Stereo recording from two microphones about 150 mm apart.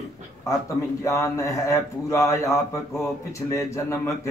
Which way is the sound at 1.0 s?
20° left (ahead or behind).